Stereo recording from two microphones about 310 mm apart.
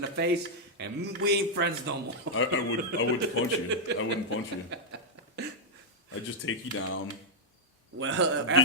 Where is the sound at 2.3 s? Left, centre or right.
Left.